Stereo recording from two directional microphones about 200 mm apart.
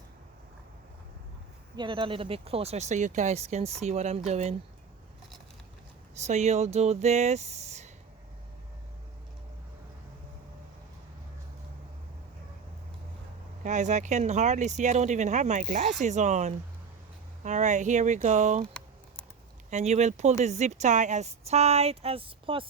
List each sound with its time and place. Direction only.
1.7 s speech: 25° right (ahead or behind)
6.1 s speech: 35° right (ahead or behind)
13.7 s speech: 35° right (ahead or behind)
19.7 s speech: 35° right (ahead or behind)